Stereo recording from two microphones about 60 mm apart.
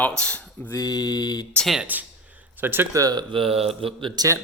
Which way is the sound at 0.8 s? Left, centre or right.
Left.